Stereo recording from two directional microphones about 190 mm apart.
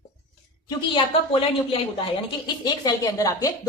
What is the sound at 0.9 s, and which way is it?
A woman's voice, 30° left (ahead or behind).